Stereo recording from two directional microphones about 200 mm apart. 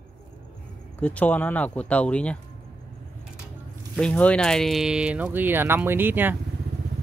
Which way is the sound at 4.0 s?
5° left (ahead or behind).